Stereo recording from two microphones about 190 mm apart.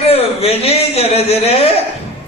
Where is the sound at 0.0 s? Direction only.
30° left (ahead or behind).